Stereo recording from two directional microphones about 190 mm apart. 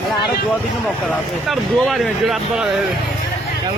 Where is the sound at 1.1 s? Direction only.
Centre (ahead or behind).